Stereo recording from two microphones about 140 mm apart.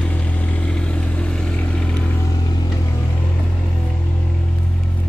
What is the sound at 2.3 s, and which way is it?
Vehicle, 30° left (ahead or behind).